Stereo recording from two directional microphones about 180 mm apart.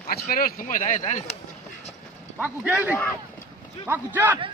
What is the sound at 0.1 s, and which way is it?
Speech, 55° left (ahead or behind).